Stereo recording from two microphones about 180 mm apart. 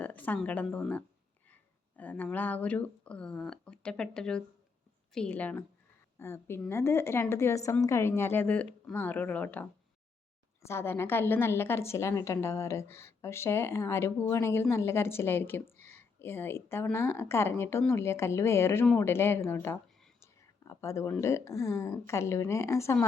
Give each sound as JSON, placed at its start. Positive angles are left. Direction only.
{"t": 0.0, "sound": "a woman's voice", "side_deg": 10}
{"t": 10.7, "sound": "a woman's voice", "side_deg": 15}